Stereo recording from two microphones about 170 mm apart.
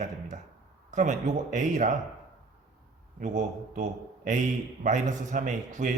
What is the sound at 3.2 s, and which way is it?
A man's voice, 45° right (ahead or behind).